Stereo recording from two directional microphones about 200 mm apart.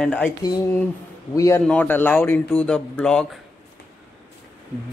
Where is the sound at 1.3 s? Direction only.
15° left (ahead or behind).